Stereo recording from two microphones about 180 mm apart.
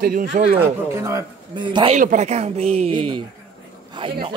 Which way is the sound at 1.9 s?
45° right (ahead or behind).